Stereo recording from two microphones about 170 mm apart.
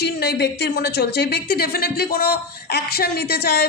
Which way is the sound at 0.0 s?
75° left (ahead or behind).